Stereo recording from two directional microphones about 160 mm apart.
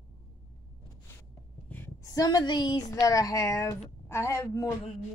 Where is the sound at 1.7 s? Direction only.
15° left (ahead or behind).